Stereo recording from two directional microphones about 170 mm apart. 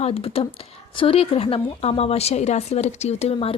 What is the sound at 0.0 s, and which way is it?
A woman's voice, 35° left (ahead or behind).